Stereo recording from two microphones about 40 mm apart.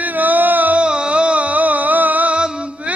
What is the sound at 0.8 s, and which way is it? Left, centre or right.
Music, right.